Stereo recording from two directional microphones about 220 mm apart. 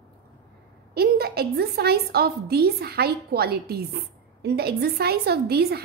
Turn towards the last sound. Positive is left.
turn(degrees=-45)  # may be behind; listen again after turning